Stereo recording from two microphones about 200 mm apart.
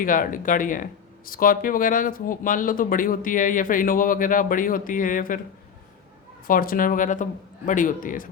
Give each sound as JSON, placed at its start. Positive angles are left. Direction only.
{"t": 0.0, "sound": "speech", "side_deg": 45}
{"t": 6.5, "sound": "speech", "side_deg": 45}